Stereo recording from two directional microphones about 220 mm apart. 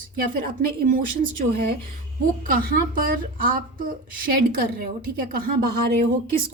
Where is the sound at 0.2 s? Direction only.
40° right (ahead or behind).